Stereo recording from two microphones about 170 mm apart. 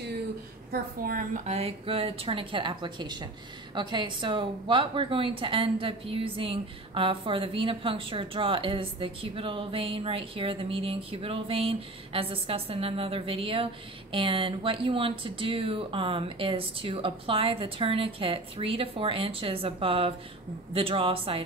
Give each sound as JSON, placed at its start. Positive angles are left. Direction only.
{"t": 0.7, "sound": "a woman's voice", "side_deg": -55}